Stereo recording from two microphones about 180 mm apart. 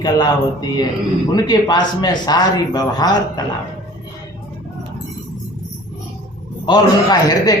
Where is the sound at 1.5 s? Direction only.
25° left (ahead or behind).